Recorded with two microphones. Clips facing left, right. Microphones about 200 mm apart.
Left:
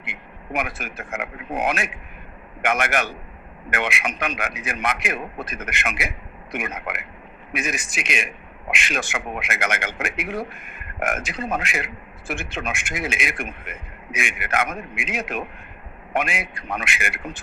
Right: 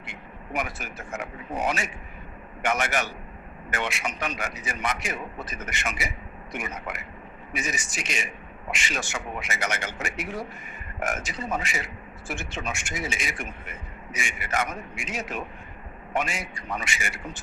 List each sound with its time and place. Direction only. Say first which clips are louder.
0.0 s a man's voice: left 2 dB; 60° left (ahead or behind)